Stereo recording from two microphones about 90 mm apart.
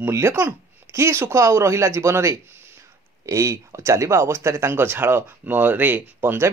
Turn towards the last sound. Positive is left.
turn(degrees=-25)  # may be behind; listen again after turning